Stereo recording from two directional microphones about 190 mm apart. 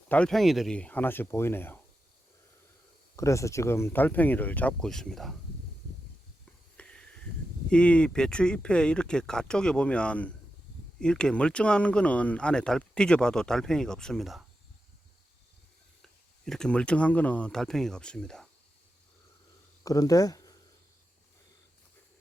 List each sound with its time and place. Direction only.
0.1 s speech: 5° left (ahead or behind)
3.2 s speech: 15° left (ahead or behind)
6.7 s a sound: 5° left (ahead or behind)
7.7 s speech: 5° left (ahead or behind)
16.5 s speech: 5° left (ahead or behind)
19.8 s speech: 20° left (ahead or behind)